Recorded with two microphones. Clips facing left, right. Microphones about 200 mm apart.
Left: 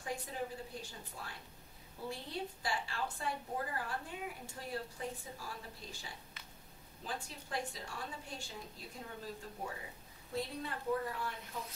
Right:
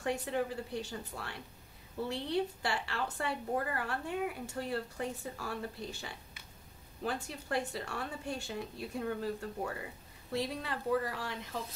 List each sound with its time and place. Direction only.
0.0 s a woman's voice: 70° right (ahead or behind)
10.3 s a woman's voice: 80° right